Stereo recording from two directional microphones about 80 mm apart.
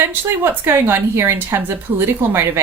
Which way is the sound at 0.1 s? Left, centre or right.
Right.